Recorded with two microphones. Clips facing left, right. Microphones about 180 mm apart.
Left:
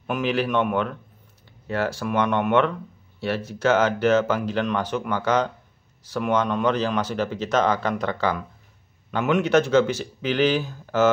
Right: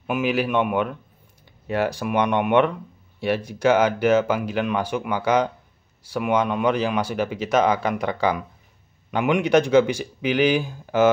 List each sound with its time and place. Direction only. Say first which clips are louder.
0.0 s speech: right 1 dB; 10° right (ahead or behind)